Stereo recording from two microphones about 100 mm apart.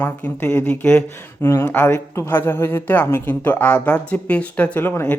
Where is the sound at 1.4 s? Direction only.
25° left (ahead or behind).